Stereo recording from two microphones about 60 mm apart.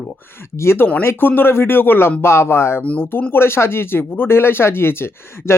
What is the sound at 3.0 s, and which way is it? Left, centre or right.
Speech, left.